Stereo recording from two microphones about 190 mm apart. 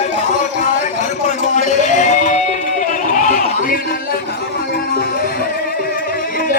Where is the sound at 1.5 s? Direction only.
40° left (ahead or behind).